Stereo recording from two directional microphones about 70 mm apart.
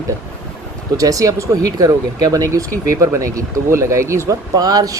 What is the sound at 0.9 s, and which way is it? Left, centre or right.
Speech, right.